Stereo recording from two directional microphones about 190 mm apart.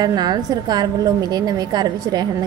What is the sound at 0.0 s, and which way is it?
A woman's voice, 20° right (ahead or behind).